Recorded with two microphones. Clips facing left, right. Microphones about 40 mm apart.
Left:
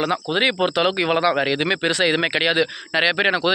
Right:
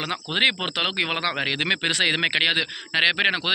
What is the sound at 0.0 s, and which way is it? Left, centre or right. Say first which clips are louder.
Speech: left 3 dB; right.